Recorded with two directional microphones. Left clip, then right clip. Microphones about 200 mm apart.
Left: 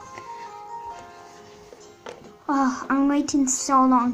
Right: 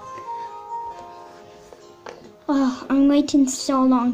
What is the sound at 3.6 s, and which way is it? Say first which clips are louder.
Speech: left 1 dB; centre (ahead or behind).